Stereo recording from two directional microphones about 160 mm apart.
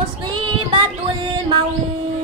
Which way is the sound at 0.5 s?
30° right (ahead or behind).